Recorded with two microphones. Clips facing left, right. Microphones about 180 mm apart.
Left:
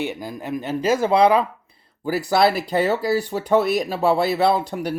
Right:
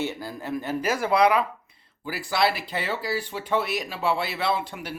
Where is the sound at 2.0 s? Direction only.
40° left (ahead or behind).